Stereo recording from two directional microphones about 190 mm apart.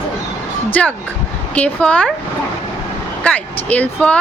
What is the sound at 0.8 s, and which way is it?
Speech, 5° left (ahead or behind).